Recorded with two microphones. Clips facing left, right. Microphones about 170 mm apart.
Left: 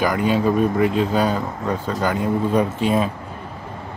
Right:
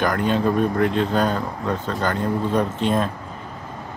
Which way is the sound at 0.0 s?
5° left (ahead or behind).